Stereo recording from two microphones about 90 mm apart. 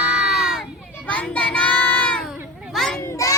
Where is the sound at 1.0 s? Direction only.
15° left (ahead or behind).